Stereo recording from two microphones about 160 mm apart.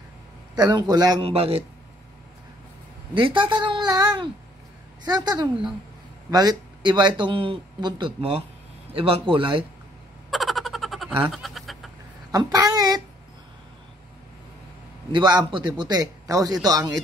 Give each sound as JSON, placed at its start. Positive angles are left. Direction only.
{"t": 0.6, "sound": "speech", "side_deg": -25}
{"t": 1.2, "sound": "speech", "side_deg": -35}
{"t": 3.2, "sound": "speech", "side_deg": -30}
{"t": 10.3, "sound": "a sound", "side_deg": 0}
{"t": 12.3, "sound": "speech", "side_deg": -25}
{"t": 15.1, "sound": "speech", "side_deg": -30}